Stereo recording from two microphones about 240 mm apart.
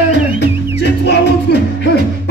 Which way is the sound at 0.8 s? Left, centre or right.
Left.